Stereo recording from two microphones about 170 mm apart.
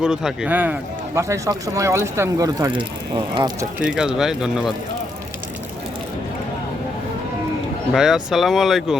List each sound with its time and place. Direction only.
0.0 s speech: 5° right (ahead or behind); by 3.7 s 25° right (ahead or behind)
3.8 s speech: 5° right (ahead or behind)
7.9 s speech: 5° right (ahead or behind)